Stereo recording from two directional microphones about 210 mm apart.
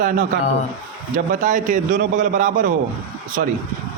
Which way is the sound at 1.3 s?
35° right (ahead or behind).